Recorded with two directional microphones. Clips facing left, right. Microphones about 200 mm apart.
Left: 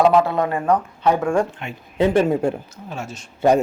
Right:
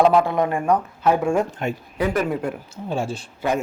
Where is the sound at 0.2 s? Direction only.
15° right (ahead or behind).